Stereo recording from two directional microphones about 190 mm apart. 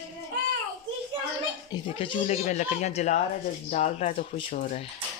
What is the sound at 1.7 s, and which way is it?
Speech, 30° left (ahead or behind).